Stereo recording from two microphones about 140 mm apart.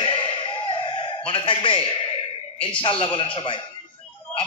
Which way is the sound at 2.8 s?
40° left (ahead or behind).